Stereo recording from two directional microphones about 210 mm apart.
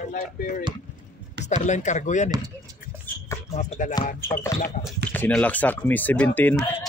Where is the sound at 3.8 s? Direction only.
40° left (ahead or behind).